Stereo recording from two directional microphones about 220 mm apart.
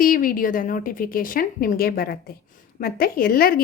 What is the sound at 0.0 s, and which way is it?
A woman's voice, 40° left (ahead or behind).